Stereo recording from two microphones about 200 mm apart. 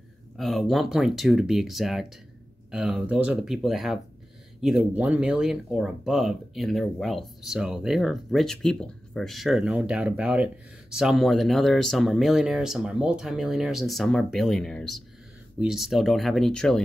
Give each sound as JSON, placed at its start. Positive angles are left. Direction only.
{"t": 0.4, "sound": "speech", "side_deg": 0}